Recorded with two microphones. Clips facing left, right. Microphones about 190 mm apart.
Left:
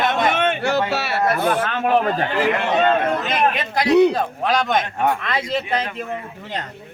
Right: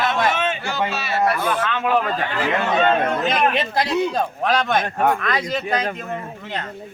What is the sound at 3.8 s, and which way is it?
Speech, 65° left (ahead or behind).